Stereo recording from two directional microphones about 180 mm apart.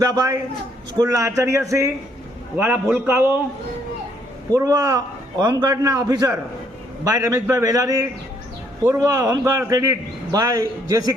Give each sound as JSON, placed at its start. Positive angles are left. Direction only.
{"t": 0.0, "sound": "a man's voice", "side_deg": -20}
{"t": 4.5, "sound": "a man's voice", "side_deg": -20}